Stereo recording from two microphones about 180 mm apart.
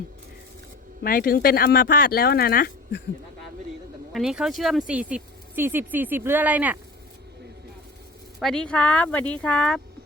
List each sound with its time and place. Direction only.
1.0 s speech: 55° left (ahead or behind)
4.1 s speech: centre (ahead or behind)
8.4 s speech: centre (ahead or behind)